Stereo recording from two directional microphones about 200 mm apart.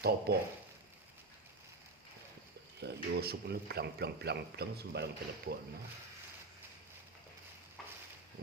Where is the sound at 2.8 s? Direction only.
55° right (ahead or behind).